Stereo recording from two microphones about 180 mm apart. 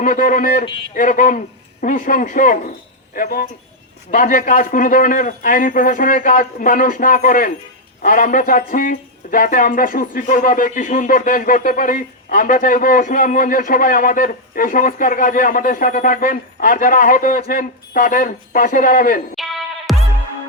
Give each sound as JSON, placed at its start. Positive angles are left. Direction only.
{"t": 0.0, "sound": "speech", "side_deg": 50}
{"t": 19.9, "sound": "music", "side_deg": 0}